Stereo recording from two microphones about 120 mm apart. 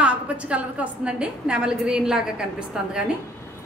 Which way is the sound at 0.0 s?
10° right (ahead or behind).